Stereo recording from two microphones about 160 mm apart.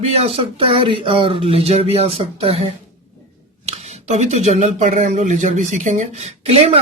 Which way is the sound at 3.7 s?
45° right (ahead or behind).